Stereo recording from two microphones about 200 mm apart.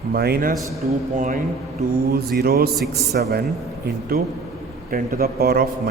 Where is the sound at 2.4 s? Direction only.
50° right (ahead or behind).